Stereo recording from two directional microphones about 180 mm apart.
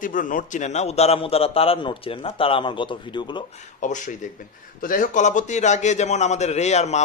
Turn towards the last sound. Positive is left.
turn(degrees=40)  # may be behind; listen again after turning